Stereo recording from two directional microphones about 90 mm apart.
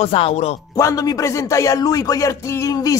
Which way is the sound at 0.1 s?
75° left (ahead or behind).